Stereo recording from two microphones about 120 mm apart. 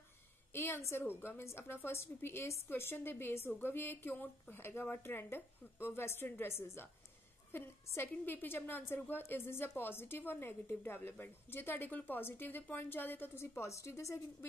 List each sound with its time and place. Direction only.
0.5 s a woman's voice: 20° left (ahead or behind)